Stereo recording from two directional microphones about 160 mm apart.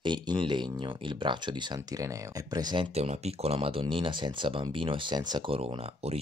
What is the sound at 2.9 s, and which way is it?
Speech, 40° right (ahead or behind).